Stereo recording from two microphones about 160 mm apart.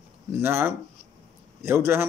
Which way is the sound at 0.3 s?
15° right (ahead or behind).